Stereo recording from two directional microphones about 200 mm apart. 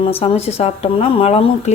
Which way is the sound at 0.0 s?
25° left (ahead or behind).